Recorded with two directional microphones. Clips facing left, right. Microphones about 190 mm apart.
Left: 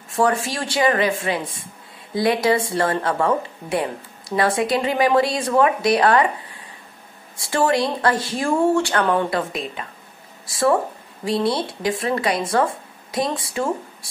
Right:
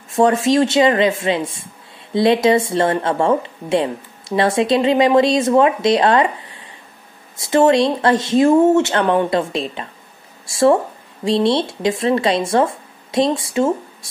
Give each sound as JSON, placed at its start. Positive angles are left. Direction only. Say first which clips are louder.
{"t": 0.1, "sound": "speech", "louder": "right 6 dB", "side_deg": -25}
{"t": 7.3, "sound": "speech", "louder": "right 6 dB", "side_deg": -20}